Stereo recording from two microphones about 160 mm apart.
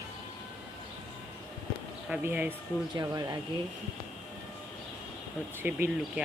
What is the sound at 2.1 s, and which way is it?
Speech, 10° right (ahead or behind).